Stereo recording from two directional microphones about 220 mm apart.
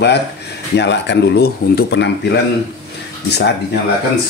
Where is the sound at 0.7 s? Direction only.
50° left (ahead or behind).